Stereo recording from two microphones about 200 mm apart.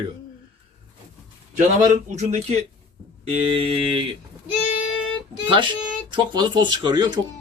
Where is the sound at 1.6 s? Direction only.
35° right (ahead or behind).